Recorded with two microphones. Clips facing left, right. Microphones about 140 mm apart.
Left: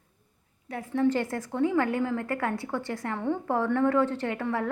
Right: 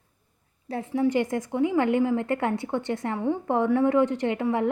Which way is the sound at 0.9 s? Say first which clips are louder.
Right 2 dB; 15° right (ahead or behind).